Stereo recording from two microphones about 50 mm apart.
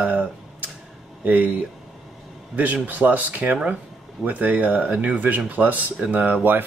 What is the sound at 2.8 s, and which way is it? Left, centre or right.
Speech, right.